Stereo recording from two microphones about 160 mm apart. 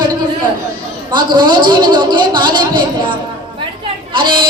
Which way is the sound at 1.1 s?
30° right (ahead or behind).